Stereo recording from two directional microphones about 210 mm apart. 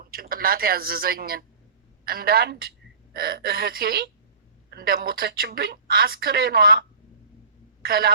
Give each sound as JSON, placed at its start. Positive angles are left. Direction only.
{"t": 0.0, "sound": "a woman's voice", "side_deg": -45}